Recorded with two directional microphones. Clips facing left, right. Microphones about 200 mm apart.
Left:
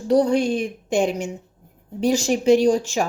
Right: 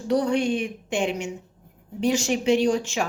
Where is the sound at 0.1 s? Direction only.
35° left (ahead or behind).